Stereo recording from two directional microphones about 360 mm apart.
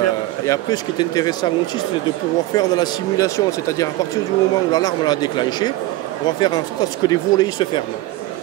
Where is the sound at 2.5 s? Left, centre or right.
Centre.